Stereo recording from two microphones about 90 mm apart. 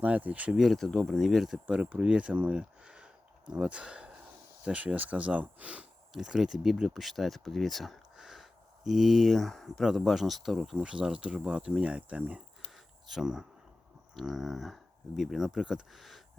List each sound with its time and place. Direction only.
0.0 s speech: 15° right (ahead or behind)
0.5 s speech: centre (ahead or behind)
1.6 s speech: 15° right (ahead or behind)
13.1 s speech: 5° right (ahead or behind)